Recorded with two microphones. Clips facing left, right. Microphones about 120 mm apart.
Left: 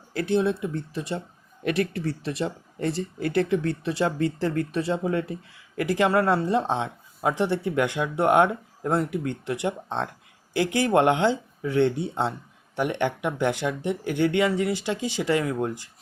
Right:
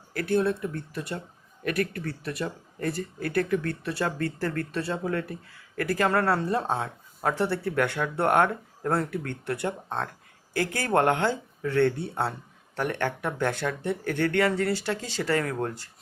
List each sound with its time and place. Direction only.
0.1 s speech: 20° left (ahead or behind)